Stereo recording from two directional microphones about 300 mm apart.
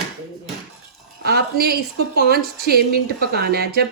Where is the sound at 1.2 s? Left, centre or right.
Right.